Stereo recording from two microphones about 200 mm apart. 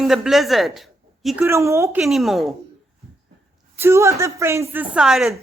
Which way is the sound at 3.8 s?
15° right (ahead or behind).